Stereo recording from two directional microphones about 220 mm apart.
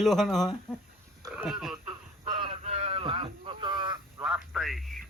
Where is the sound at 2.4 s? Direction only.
30° right (ahead or behind).